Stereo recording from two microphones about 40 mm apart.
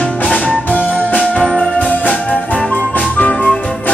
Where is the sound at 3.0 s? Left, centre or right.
Centre.